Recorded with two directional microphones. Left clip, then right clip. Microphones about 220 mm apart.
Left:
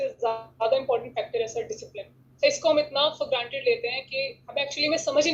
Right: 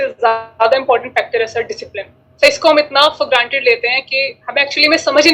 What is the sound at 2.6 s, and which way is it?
A woman's voice, 65° right (ahead or behind).